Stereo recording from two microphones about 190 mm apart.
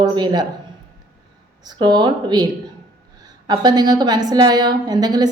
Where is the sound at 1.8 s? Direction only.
20° right (ahead or behind).